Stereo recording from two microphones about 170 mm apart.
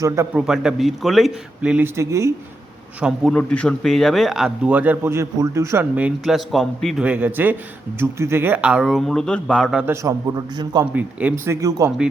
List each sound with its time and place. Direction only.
0.3 s speech: 5° right (ahead or behind)
2.0 s speech: 15° right (ahead or behind)
3.0 s speech: 5° right (ahead or behind)
3.3 s speech: 5° left (ahead or behind)
9.8 s a man's voice: 15° right (ahead or behind)
10.9 s speech: 10° right (ahead or behind)
11.8 s a man's voice: 20° right (ahead or behind)